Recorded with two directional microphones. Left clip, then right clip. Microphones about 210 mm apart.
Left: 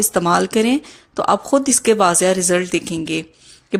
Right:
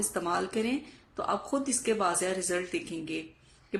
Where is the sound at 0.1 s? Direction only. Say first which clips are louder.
Left 15 dB; 45° left (ahead or behind).